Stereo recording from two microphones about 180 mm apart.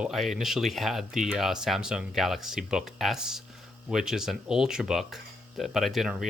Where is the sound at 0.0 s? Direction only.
Centre (ahead or behind).